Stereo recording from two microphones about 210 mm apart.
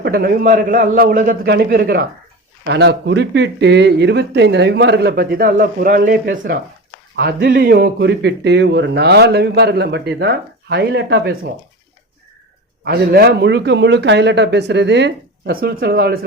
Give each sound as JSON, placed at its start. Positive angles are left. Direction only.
{"t": 0.0, "sound": "speech", "side_deg": -45}
{"t": 12.8, "sound": "a man's voice", "side_deg": -45}